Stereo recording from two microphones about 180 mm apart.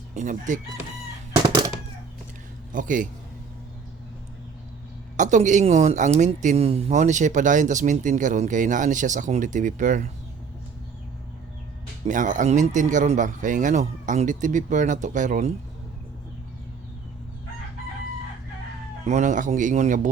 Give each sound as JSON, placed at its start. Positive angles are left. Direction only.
{"t": 0.2, "sound": "speech", "side_deg": -45}
{"t": 2.7, "sound": "speech", "side_deg": -45}
{"t": 5.1, "sound": "speech", "side_deg": -45}
{"t": 12.0, "sound": "speech", "side_deg": -45}
{"t": 19.0, "sound": "speech", "side_deg": -45}